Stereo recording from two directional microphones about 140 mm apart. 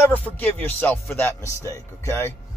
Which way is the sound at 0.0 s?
10° left (ahead or behind).